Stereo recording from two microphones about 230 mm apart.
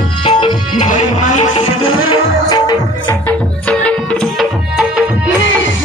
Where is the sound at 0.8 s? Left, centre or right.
Left; by 3.2 s centre.